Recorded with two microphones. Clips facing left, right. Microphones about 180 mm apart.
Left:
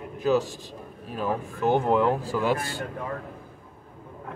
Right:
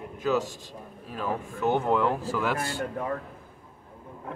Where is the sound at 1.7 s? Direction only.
25° left (ahead or behind).